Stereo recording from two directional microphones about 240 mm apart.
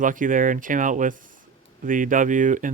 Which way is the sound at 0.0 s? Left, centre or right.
Right.